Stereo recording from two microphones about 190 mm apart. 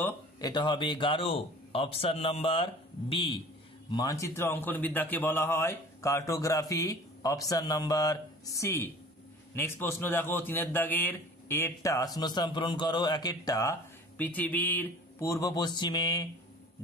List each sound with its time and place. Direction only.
0.0 s speech: 20° left (ahead or behind)
3.9 s a man's voice: 20° left (ahead or behind)